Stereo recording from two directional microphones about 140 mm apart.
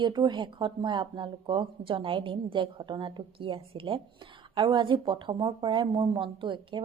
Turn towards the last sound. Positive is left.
turn(degrees=-35)  # may be behind; listen again after turning